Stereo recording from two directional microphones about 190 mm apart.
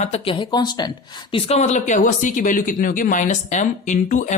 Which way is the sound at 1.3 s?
35° left (ahead or behind).